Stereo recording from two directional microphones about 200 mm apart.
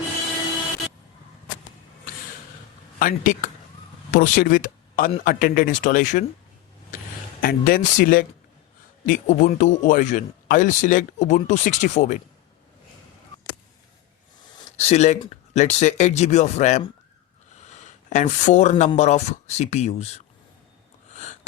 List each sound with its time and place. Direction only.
3.0 s speech: 40° left (ahead or behind)
7.4 s speech: 45° left (ahead or behind)
14.8 s speech: 35° left (ahead or behind)
21.1 s sniff: 35° left (ahead or behind)